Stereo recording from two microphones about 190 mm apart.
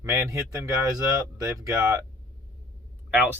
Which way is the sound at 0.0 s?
15° right (ahead or behind).